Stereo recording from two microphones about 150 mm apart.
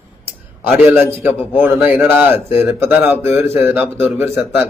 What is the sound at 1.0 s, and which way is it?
A man's voice, 15° right (ahead or behind).